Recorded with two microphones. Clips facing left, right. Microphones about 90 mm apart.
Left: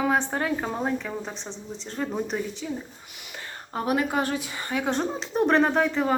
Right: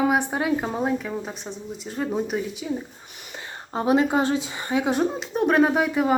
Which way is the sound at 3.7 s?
25° right (ahead or behind).